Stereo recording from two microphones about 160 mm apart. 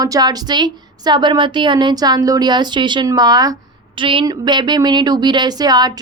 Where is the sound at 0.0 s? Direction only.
25° right (ahead or behind).